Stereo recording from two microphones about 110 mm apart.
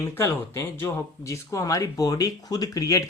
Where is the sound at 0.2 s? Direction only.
25° left (ahead or behind).